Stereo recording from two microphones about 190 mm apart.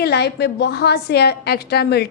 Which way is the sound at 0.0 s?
60° left (ahead or behind).